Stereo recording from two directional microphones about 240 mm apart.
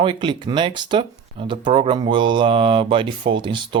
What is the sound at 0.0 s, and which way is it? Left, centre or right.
Speech, centre.